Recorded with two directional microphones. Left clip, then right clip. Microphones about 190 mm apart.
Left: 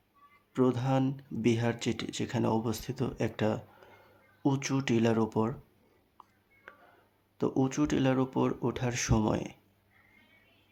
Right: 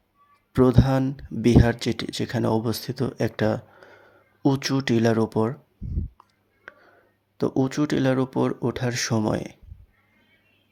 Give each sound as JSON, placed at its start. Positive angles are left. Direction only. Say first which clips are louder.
{"t": 0.5, "sound": "speech", "louder": "right 8 dB", "side_deg": -30}
{"t": 6.7, "sound": "a sound", "louder": "right 8 dB", "side_deg": -20}
{"t": 7.3, "sound": "speech", "louder": "right 6 dB", "side_deg": -20}